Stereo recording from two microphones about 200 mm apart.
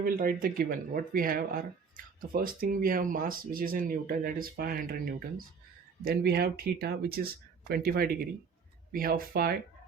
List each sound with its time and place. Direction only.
0.0 s speech: 45° right (ahead or behind)